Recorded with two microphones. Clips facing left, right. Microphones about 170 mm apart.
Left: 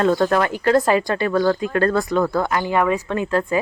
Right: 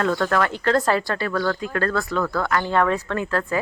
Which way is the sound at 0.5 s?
10° left (ahead or behind).